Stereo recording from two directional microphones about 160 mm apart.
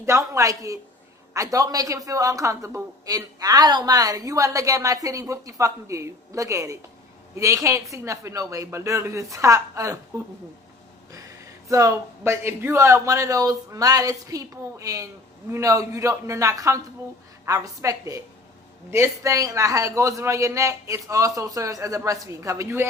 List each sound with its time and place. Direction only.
0.0 s a woman's voice: 20° right (ahead or behind)
11.1 s a woman's voice: 20° right (ahead or behind)